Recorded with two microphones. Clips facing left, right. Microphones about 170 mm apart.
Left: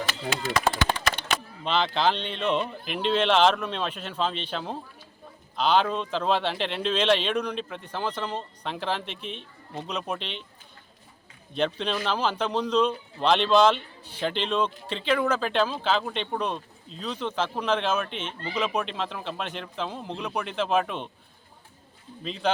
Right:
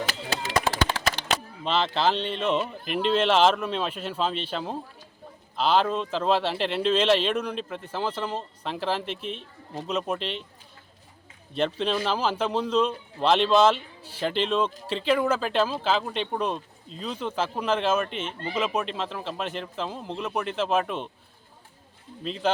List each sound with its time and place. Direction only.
0.9 s a sound: 90° right
1.6 s speech: centre (ahead or behind)
11.5 s speech: centre (ahead or behind)
22.2 s speech: centre (ahead or behind)